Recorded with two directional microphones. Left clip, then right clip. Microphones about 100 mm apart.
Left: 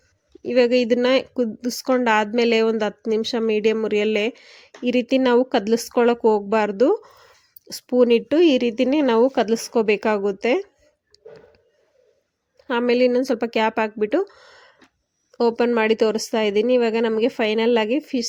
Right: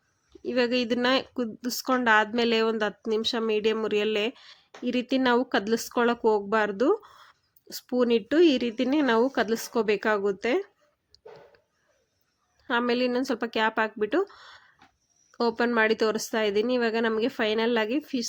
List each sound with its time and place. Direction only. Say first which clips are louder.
0.4 s speech: left 8 dB; 35° left (ahead or behind)
11.1 s a sound: left 5 dB; 20° left (ahead or behind)
12.5 s speech: left 7 dB; 40° left (ahead or behind)